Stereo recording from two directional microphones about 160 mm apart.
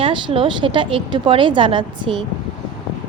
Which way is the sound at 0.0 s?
35° right (ahead or behind).